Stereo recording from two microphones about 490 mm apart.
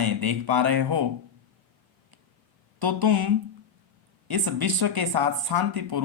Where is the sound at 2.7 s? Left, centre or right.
Right.